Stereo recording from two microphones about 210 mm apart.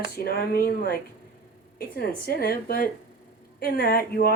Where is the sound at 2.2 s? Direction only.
45° left (ahead or behind).